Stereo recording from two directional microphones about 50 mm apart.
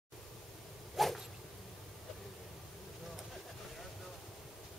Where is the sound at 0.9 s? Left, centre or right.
Centre.